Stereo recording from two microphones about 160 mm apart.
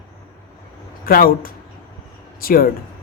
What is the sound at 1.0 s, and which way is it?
Speech, 65° left (ahead or behind).